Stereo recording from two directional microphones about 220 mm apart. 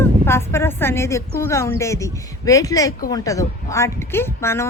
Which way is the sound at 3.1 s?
15° left (ahead or behind).